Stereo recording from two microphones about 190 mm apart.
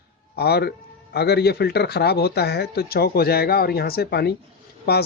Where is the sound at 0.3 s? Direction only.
60° left (ahead or behind).